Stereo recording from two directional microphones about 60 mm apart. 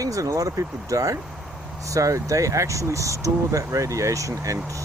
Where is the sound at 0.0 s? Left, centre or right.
Right.